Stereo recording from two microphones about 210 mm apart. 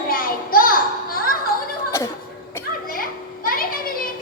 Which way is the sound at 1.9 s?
15° left (ahead or behind).